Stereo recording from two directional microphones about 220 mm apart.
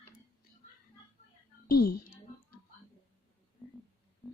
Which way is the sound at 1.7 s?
45° left (ahead or behind).